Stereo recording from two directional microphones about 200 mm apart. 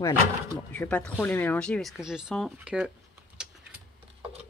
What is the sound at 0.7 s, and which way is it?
Speech, 5° left (ahead or behind).